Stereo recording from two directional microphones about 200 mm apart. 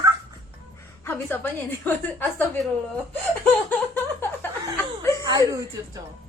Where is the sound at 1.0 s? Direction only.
10° left (ahead or behind).